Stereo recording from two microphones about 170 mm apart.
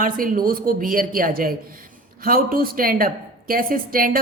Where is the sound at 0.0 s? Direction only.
55° right (ahead or behind).